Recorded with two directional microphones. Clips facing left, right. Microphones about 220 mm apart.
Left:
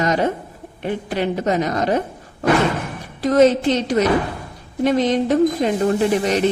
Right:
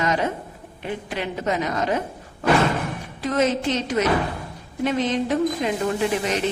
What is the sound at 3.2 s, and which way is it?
Speech, 35° left (ahead or behind).